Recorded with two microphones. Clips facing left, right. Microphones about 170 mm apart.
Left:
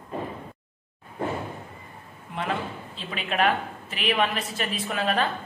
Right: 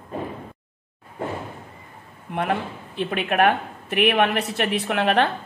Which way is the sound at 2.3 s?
60° right (ahead or behind).